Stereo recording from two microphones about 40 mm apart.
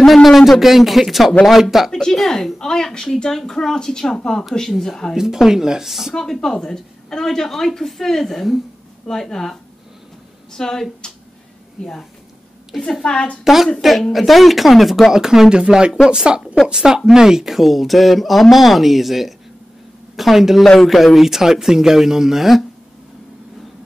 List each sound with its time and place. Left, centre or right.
0.0 s speech: centre
1.9 s speech: centre
5.1 s speech: centre
6.4 s speech: centre
12.7 s speech: centre
20.6 s speech: centre
20.9 s speech: centre